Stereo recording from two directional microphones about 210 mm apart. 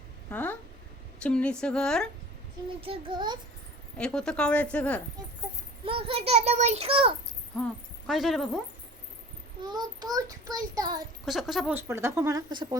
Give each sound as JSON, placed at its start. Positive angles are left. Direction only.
{"t": 0.3, "sound": "a woman's voice", "side_deg": 10}
{"t": 2.8, "sound": "a child's voice", "side_deg": -25}
{"t": 3.9, "sound": "a woman's voice", "side_deg": 5}
{"t": 5.8, "sound": "a child's voice", "side_deg": -25}
{"t": 8.0, "sound": "a woman's voice", "side_deg": 0}
{"t": 9.6, "sound": "a child's voice", "side_deg": -20}
{"t": 11.3, "sound": "a woman's voice", "side_deg": 0}